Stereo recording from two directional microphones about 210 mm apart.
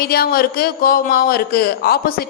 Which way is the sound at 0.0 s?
45° left (ahead or behind).